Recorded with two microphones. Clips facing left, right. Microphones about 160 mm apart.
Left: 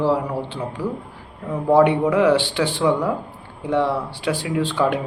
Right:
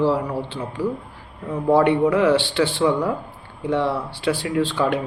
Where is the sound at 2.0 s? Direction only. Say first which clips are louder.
Even; centre (ahead or behind).